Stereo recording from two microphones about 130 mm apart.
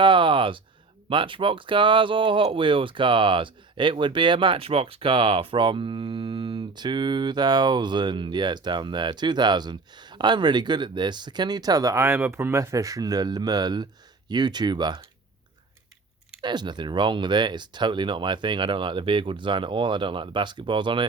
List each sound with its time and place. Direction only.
0.0 s a sound: 40° right (ahead or behind)
1.1 s speech: 40° right (ahead or behind)
16.4 s speech: 35° right (ahead or behind)